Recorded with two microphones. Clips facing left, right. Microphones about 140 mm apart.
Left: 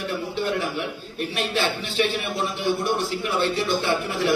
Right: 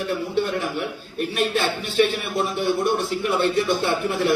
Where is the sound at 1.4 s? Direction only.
50° right (ahead or behind).